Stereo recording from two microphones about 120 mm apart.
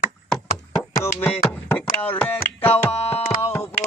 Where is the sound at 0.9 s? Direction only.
20° left (ahead or behind).